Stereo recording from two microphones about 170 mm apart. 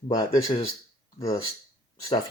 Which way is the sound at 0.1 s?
25° left (ahead or behind).